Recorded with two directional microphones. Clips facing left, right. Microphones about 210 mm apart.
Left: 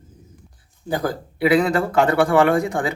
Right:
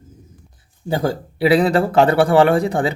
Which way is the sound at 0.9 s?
25° right (ahead or behind).